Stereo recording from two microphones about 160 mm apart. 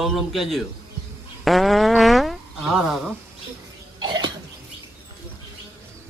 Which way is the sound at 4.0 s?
30° right (ahead or behind).